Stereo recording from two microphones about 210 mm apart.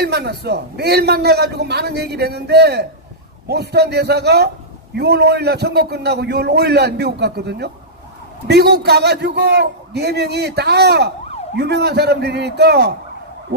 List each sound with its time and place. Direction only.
0.0 s a man's voice: 50° right (ahead or behind)